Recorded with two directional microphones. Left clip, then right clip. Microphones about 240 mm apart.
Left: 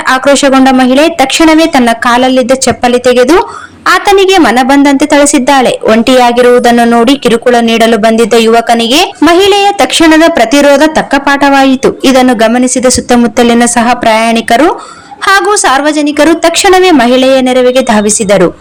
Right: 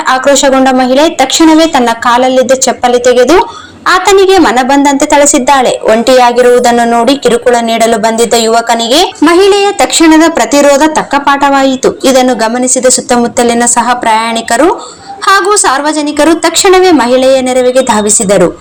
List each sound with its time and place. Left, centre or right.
0.1 s speech: left